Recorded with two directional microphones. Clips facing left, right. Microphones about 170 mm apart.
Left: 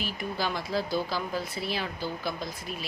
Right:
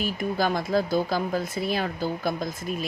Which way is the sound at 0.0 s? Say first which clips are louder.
Right 6 dB; 45° right (ahead or behind).